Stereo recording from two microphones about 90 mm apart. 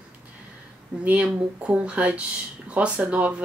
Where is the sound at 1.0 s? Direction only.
15° right (ahead or behind).